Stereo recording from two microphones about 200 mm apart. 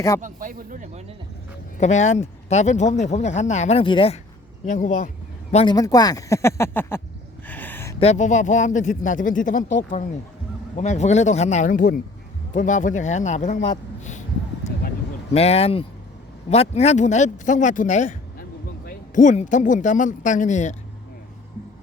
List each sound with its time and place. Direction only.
0.2 s speech: 40° right (ahead or behind)
1.8 s speech: 35° left (ahead or behind)
4.6 s speech: 40° left (ahead or behind)
5.6 s speech: 20° left (ahead or behind)
7.4 s a sound: 10° left (ahead or behind)
7.9 s speech: 35° left (ahead or behind)
15.3 s speech: 30° left (ahead or behind)